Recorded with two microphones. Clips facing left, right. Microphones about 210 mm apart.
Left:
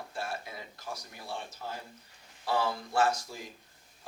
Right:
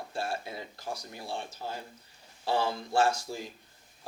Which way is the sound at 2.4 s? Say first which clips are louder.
Right 1 dB; 25° right (ahead or behind).